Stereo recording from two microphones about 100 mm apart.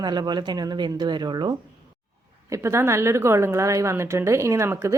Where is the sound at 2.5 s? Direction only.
30° right (ahead or behind).